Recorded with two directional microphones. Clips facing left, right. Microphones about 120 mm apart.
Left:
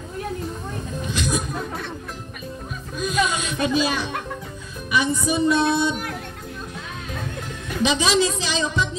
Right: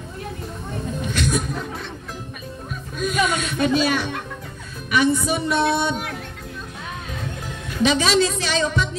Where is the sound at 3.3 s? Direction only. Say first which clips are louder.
Right 2 dB; 15° left (ahead or behind).